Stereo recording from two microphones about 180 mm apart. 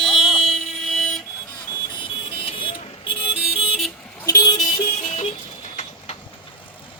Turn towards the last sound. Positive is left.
turn(degrees=40)  # may be behind; listen again after turning